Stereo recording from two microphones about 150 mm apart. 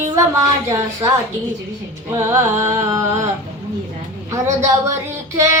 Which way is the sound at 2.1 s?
20° right (ahead or behind).